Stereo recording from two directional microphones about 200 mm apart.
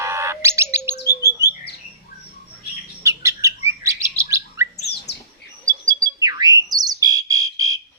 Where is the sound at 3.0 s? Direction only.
15° right (ahead or behind).